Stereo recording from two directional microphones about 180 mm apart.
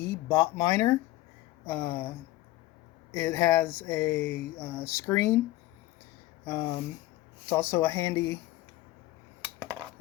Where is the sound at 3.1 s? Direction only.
15° left (ahead or behind).